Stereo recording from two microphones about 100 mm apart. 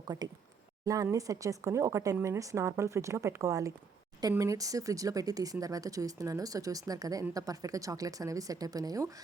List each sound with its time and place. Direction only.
0.1 s speech: 35° right (ahead or behind)